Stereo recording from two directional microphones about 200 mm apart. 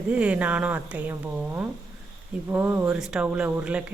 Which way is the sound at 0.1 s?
5° right (ahead or behind).